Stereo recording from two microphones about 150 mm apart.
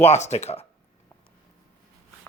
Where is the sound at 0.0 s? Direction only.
45° left (ahead or behind).